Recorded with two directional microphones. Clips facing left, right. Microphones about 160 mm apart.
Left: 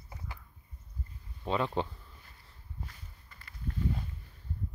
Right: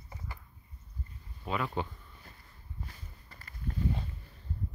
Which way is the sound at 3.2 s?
40° right (ahead or behind).